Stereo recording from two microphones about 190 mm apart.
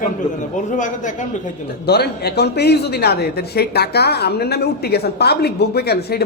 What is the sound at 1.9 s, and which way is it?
Speech, 60° left (ahead or behind).